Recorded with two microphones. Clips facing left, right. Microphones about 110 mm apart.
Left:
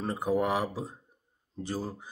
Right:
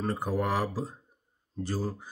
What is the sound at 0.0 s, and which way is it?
Speech, 20° left (ahead or behind).